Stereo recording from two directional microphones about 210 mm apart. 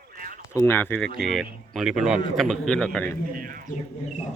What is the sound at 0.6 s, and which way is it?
Speech, 10° left (ahead or behind).